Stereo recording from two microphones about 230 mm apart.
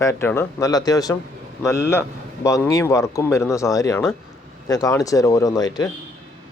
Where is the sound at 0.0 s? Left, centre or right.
Centre.